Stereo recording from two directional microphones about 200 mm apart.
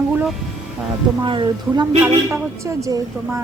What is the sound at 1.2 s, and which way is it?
A woman's voice, 25° right (ahead or behind).